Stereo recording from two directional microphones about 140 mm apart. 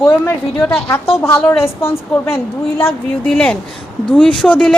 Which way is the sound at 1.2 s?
15° left (ahead or behind).